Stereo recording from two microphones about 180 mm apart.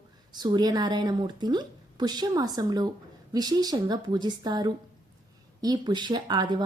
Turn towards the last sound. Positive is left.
turn(degrees=-25)  # may be behind; listen again after turning